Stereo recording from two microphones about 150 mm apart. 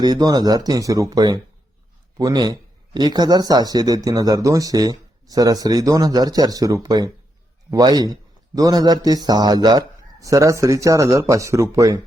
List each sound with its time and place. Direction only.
0.0 s speech: 25° right (ahead or behind)